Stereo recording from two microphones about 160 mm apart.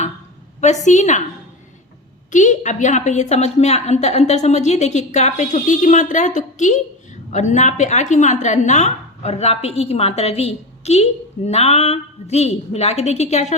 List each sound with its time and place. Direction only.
0.6 s a woman's voice: 45° left (ahead or behind)
2.3 s a woman's voice: 50° left (ahead or behind)